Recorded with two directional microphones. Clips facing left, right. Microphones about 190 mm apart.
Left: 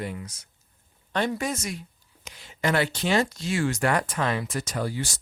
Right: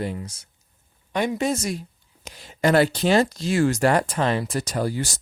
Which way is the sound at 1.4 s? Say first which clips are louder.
Right 6 dB; 30° right (ahead or behind).